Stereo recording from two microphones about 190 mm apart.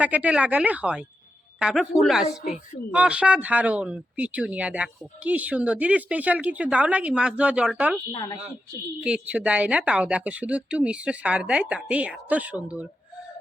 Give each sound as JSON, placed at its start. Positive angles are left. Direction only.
{"t": 0.0, "sound": "a woman's voice", "side_deg": -10}
{"t": 8.1, "sound": "speech", "side_deg": 20}
{"t": 9.0, "sound": "speech", "side_deg": -5}